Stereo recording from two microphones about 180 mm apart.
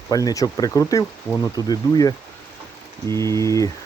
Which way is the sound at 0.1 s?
20° left (ahead or behind).